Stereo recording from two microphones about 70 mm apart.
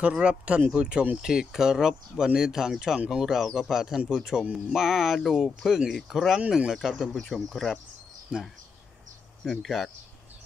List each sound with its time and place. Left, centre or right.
0.0 s speech: centre
8.3 s speech: centre
9.4 s speech: centre